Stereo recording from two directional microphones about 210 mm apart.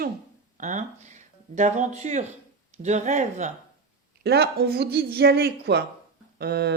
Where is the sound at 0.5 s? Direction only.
35° right (ahead or behind).